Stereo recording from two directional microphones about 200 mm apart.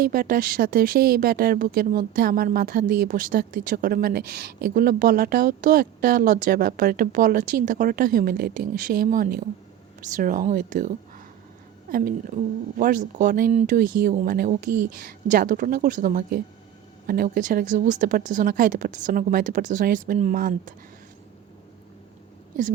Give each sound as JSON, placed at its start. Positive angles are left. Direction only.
{"t": 0.0, "sound": "a woman's voice", "side_deg": -45}